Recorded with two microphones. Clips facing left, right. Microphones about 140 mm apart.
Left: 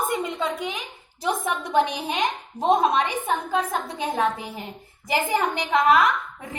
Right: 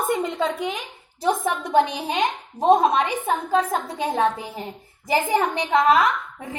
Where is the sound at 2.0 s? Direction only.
30° right (ahead or behind).